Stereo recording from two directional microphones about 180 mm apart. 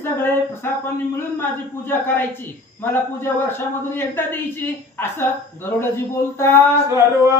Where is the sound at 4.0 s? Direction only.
10° left (ahead or behind).